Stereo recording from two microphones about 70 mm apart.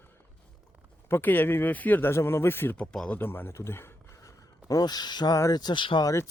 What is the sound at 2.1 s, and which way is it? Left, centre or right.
Speech, left.